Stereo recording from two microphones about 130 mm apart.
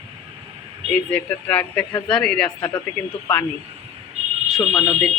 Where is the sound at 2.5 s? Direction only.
20° left (ahead or behind).